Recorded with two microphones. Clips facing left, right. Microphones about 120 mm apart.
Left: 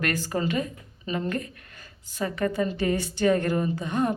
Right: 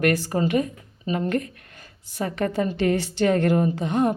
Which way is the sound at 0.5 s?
45° right (ahead or behind).